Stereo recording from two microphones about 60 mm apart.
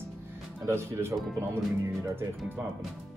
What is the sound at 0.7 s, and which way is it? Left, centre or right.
Speech, right.